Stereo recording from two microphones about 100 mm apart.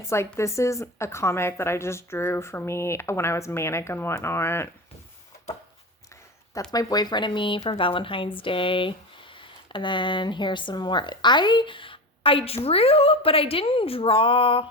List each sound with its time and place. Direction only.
0.0 s a woman's voice: 30° left (ahead or behind)
6.7 s speech: 40° left (ahead or behind); by 12.5 s 65° left (ahead or behind)
12.6 s a woman's voice: 75° left (ahead or behind)